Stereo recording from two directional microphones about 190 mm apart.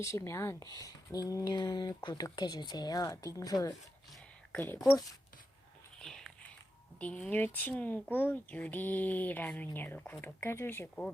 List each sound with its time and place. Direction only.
0.0 s speech: 15° left (ahead or behind)
6.0 s whispering: 5° left (ahead or behind)
7.0 s speech: 5° left (ahead or behind)